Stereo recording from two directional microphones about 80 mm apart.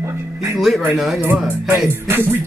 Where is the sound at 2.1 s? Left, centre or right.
Right.